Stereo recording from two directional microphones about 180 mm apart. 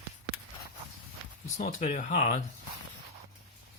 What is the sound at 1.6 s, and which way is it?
Speech, 40° left (ahead or behind).